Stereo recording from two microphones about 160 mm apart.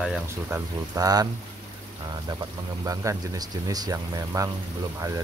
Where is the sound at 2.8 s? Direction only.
20° right (ahead or behind).